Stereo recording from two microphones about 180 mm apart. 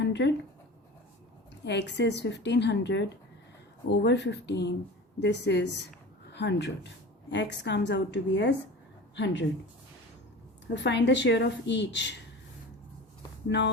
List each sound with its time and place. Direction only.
0.0 s writing: 75° left (ahead or behind)
1.6 s a woman's voice: 75° left (ahead or behind)
10.8 s a woman's voice: 75° left (ahead or behind)